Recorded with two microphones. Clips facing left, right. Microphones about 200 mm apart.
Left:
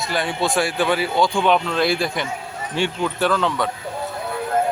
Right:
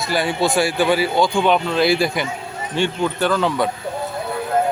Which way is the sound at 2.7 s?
5° left (ahead or behind).